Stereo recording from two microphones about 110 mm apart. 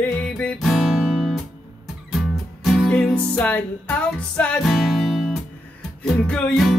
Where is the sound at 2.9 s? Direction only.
10° left (ahead or behind).